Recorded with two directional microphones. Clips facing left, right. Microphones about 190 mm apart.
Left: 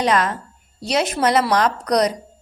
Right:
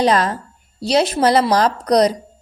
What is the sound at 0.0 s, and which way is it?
A woman's voice, 35° right (ahead or behind).